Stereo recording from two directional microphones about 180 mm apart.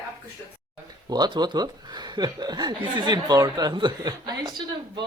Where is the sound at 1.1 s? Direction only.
25° right (ahead or behind).